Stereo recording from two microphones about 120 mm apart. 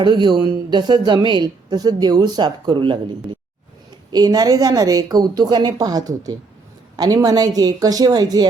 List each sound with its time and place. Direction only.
0.0 s a woman's voice: 40° right (ahead or behind)
4.1 s a woman's voice: 35° right (ahead or behind)